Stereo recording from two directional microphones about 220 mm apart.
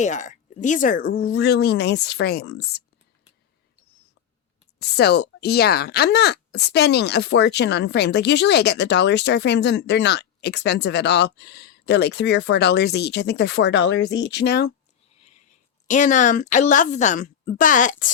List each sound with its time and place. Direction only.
0.0 s speech: 35° left (ahead or behind)
4.8 s speech: 50° left (ahead or behind)
15.9 s a woman's voice: 35° left (ahead or behind)